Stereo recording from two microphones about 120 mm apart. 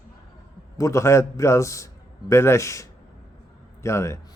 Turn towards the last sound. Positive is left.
turn(degrees=25)  # may be behind; listen again after turning